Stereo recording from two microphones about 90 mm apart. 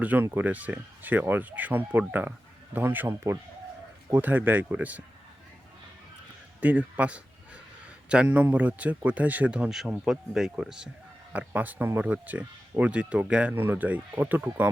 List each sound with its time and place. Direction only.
0.0 s speech: 20° right (ahead or behind)
6.6 s a sound: 20° right (ahead or behind)
8.1 s a man's voice: 10° right (ahead or behind)